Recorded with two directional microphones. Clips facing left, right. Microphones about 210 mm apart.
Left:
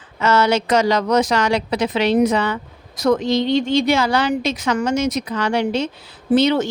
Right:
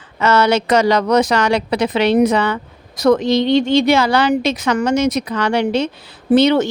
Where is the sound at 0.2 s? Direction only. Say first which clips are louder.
Right 2 dB; 65° right (ahead or behind).